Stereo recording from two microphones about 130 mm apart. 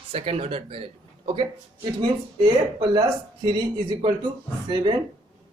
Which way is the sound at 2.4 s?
35° right (ahead or behind).